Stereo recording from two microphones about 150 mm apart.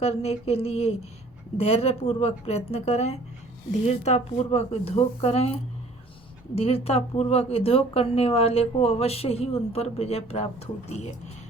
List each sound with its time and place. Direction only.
0.0 s speech: 45° left (ahead or behind)
6.6 s speech: 40° left (ahead or behind)